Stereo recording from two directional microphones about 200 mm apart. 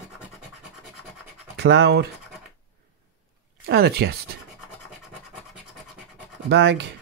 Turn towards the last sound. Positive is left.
turn(degrees=-60)  # may be behind; listen again after turning